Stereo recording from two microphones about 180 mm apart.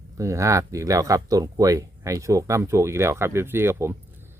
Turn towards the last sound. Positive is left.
turn(degrees=-15)  # may be behind; listen again after turning